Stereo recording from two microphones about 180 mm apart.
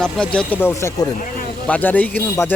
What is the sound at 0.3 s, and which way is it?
Speech, 10° left (ahead or behind).